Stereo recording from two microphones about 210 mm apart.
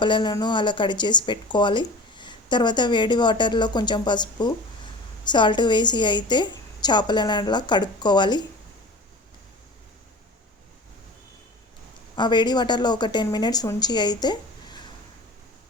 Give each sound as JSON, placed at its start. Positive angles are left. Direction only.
{"t": 0.0, "sound": "speech", "side_deg": 20}
{"t": 12.1, "sound": "speech", "side_deg": 20}